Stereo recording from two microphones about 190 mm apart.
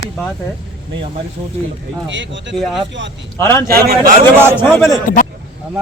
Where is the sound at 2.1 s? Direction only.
75° right (ahead or behind).